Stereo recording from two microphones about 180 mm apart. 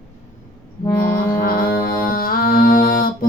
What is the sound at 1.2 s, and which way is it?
Mantra, 55° left (ahead or behind).